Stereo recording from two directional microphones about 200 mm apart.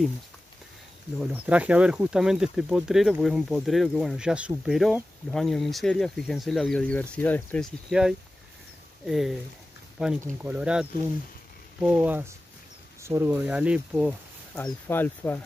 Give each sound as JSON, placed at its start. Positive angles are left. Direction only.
{"t": 1.2, "sound": "speech", "side_deg": -5}
{"t": 14.5, "sound": "speech", "side_deg": 10}